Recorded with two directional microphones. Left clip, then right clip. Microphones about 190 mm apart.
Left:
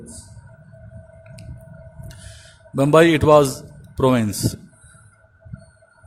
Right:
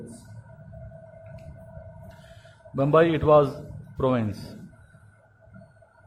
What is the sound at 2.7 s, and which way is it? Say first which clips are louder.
Speech: left 6 dB; 65° left (ahead or behind).